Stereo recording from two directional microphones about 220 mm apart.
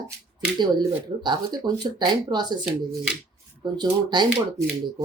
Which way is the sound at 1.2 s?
20° right (ahead or behind).